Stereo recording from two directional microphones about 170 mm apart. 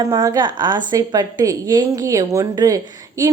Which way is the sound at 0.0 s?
20° right (ahead or behind).